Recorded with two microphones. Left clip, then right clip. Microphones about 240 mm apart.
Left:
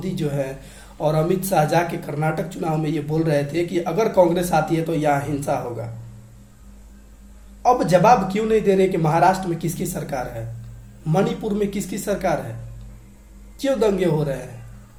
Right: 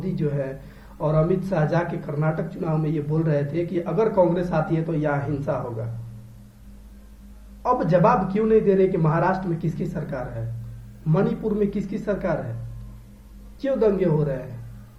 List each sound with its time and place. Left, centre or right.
0.0 s speech: centre
7.6 s speech: centre
13.6 s speech: centre